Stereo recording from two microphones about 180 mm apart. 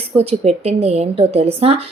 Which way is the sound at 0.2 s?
35° right (ahead or behind).